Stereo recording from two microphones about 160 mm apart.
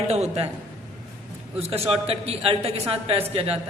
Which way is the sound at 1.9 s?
40° right (ahead or behind).